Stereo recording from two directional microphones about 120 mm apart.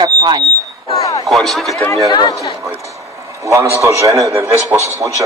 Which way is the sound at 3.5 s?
25° right (ahead or behind).